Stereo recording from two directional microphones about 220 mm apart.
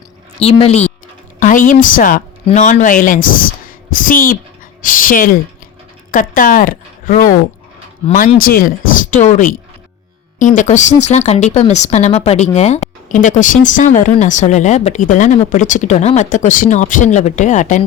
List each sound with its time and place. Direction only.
0.3 s a woman's voice: 25° left (ahead or behind)